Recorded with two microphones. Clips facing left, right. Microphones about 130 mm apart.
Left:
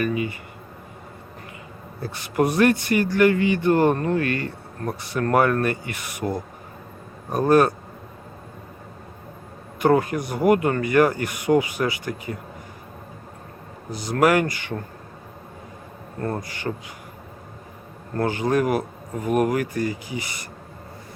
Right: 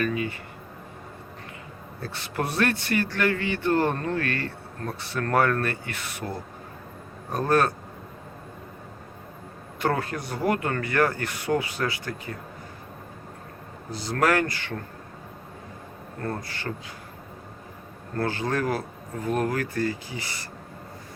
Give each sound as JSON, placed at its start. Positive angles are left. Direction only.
{"t": 0.0, "sound": "a man's voice", "side_deg": 10}
{"t": 2.0, "sound": "a man's voice", "side_deg": 10}
{"t": 9.8, "sound": "a man's voice", "side_deg": 15}
{"t": 13.9, "sound": "a man's voice", "side_deg": 15}
{"t": 16.2, "sound": "a man's voice", "side_deg": 15}
{"t": 18.2, "sound": "a man's voice", "side_deg": 15}